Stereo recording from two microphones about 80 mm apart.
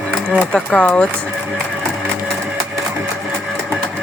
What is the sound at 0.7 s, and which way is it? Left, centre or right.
Speech, centre.